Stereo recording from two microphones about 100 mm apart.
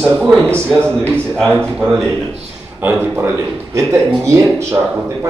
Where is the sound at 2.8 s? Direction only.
25° right (ahead or behind).